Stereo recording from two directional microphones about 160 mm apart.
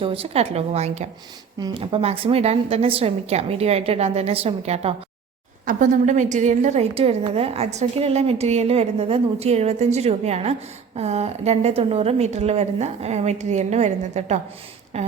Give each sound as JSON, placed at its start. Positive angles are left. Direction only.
{"t": 0.0, "sound": "a woman's voice", "side_deg": -35}
{"t": 1.5, "sound": "a woman's voice", "side_deg": -30}
{"t": 5.6, "sound": "a woman's voice", "side_deg": -50}